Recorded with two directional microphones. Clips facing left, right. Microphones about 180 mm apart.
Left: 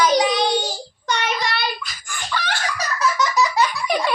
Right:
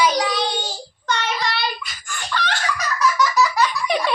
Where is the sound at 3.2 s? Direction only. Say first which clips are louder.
Even; 20° left (ahead or behind).